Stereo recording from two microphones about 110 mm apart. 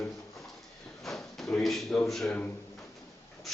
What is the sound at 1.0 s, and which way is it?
Drawer open or close, centre (ahead or behind).